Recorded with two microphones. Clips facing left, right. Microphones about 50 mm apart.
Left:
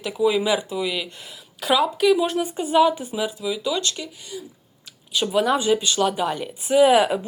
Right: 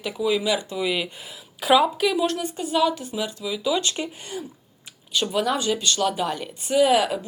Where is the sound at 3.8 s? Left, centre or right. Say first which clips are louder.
Right 1 dB; right.